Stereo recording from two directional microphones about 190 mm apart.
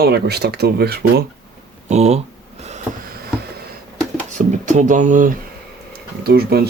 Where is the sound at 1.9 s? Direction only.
35° right (ahead or behind).